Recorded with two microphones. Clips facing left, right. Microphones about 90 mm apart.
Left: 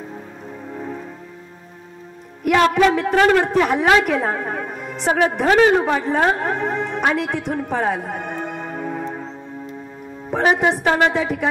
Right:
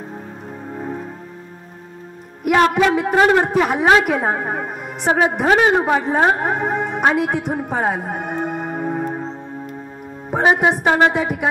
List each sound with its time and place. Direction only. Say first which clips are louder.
0.7 s music: right 3 dB; 20° right (ahead or behind)
2.4 s a woman's voice: even; 10° right (ahead or behind)
10.4 s a woman's voice: right 2 dB; 20° right (ahead or behind)